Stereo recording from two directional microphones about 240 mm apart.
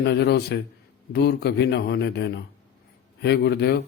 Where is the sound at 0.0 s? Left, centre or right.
Left.